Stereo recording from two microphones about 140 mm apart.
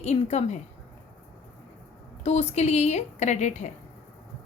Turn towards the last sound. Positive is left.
turn(degrees=55)  # may be behind; listen again after turning